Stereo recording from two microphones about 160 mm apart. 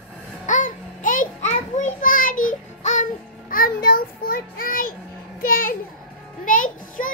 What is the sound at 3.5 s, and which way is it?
A child's voice, 65° left (ahead or behind).